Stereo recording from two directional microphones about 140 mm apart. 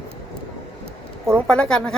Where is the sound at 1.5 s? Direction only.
5° left (ahead or behind).